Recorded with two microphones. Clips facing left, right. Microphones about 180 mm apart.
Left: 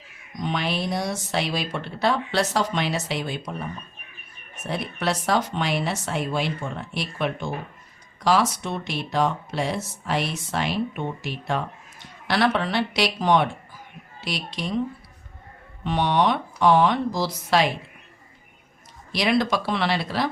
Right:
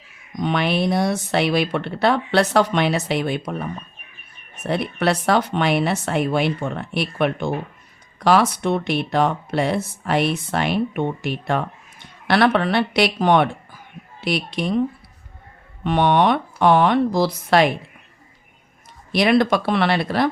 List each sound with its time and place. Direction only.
0.3 s speech: 65° right (ahead or behind)
15.8 s speech: 60° right (ahead or behind)
19.1 s speech: 55° right (ahead or behind)